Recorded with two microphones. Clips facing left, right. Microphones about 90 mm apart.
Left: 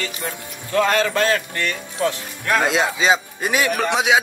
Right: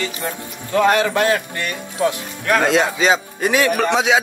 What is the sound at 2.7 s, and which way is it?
Speech, 10° left (ahead or behind).